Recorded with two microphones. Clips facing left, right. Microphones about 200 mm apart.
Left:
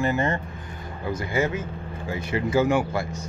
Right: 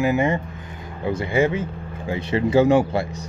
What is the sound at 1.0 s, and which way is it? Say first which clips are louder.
A man's voice: right 5 dB; 30° right (ahead or behind).